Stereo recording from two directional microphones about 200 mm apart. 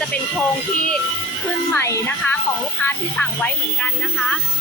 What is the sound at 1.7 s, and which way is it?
Speech, 10° left (ahead or behind).